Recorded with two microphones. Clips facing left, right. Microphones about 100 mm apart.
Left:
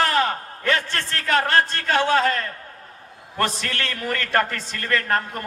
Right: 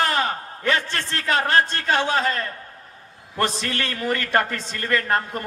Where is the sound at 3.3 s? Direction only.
20° right (ahead or behind).